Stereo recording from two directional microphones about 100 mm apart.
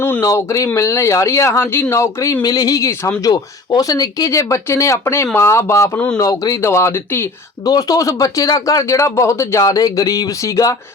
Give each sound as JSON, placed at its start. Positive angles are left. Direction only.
{"t": 0.0, "sound": "speech", "side_deg": 25}
{"t": 2.4, "sound": "speech", "side_deg": 40}
{"t": 7.6, "sound": "speech", "side_deg": 40}
{"t": 9.6, "sound": "speech", "side_deg": 40}